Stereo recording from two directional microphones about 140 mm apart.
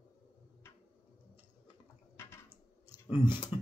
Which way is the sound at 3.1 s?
15° right (ahead or behind).